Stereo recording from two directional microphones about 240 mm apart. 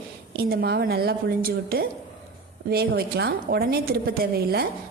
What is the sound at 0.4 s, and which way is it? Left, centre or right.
A woman's voice, right.